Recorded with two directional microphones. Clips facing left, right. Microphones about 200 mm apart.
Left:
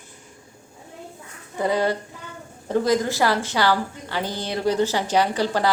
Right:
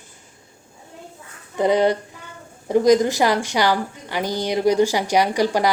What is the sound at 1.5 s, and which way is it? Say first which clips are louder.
A woman's voice: right 5 dB; 20° right (ahead or behind).